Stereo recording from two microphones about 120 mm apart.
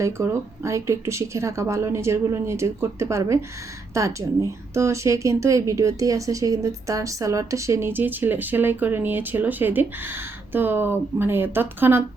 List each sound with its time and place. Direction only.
0.0 s speech: 25° right (ahead or behind)